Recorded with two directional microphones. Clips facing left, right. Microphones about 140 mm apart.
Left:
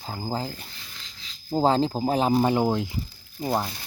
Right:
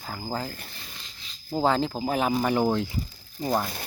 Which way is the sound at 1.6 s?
30° left (ahead or behind).